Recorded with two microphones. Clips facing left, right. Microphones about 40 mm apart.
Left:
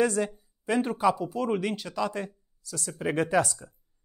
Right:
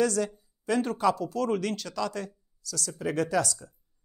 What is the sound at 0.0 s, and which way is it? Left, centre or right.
Speech, left.